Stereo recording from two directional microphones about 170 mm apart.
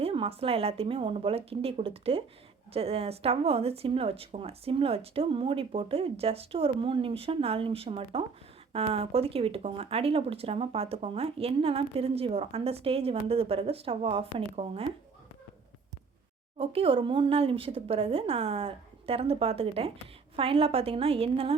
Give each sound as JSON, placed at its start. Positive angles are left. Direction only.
{"t": 0.0, "sound": "speech", "side_deg": -35}
{"t": 16.6, "sound": "speech", "side_deg": -35}